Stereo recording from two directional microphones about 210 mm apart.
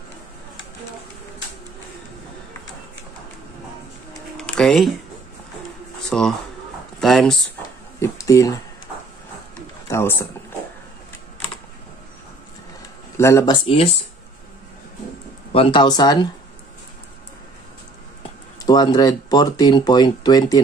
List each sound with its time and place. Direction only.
4.4 s a sound: centre (ahead or behind)
6.0 s speech: centre (ahead or behind)
8.0 s speech: 15° left (ahead or behind)
9.8 s a sound: 10° left (ahead or behind)
13.2 s speech: 15° left (ahead or behind)
15.5 s speech: 25° left (ahead or behind)
18.7 s speech: 20° left (ahead or behind)